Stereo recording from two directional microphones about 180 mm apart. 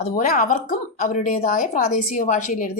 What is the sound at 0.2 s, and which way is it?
Speech, 50° left (ahead or behind).